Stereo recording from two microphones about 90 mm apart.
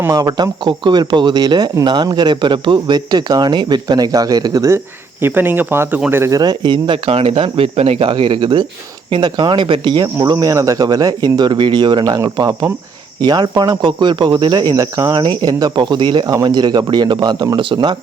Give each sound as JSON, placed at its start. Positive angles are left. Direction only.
{"t": 0.1, "sound": "speech", "side_deg": -45}
{"t": 0.6, "sound": "speech", "side_deg": -60}
{"t": 5.2, "sound": "speech", "side_deg": -25}
{"t": 6.3, "sound": "speech", "side_deg": -50}
{"t": 8.1, "sound": "speech", "side_deg": -65}
{"t": 9.0, "sound": "speech", "side_deg": -75}
{"t": 9.3, "sound": "speech", "side_deg": -55}
{"t": 10.4, "sound": "speech", "side_deg": -40}
{"t": 11.3, "sound": "speech", "side_deg": -60}
{"t": 13.2, "sound": "speech", "side_deg": -50}
{"t": 17.6, "sound": "speech", "side_deg": -60}